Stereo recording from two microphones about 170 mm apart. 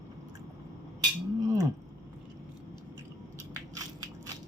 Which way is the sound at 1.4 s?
20° right (ahead or behind).